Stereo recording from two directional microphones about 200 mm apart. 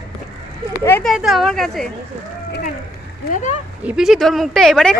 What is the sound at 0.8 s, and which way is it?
Speech, 10° left (ahead or behind).